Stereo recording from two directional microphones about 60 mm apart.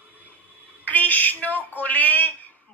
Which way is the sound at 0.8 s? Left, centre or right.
Left.